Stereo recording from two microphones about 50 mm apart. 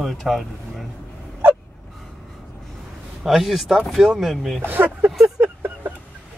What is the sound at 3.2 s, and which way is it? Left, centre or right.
A man's voice, centre.